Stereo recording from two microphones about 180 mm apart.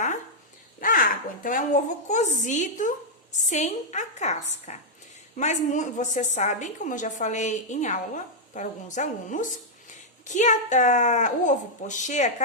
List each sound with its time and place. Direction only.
0.8 s a woman's voice: 50° left (ahead or behind)